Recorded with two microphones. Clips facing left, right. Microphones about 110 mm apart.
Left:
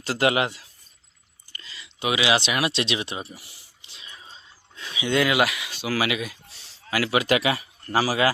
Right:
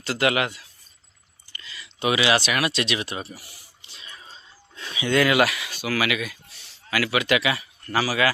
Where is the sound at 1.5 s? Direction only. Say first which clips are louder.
Right 1 dB; 35° left (ahead or behind).